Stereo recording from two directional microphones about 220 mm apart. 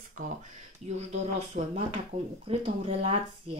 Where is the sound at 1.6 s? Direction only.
30° right (ahead or behind).